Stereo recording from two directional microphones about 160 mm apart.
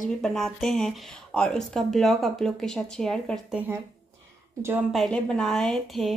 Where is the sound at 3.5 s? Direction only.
10° right (ahead or behind).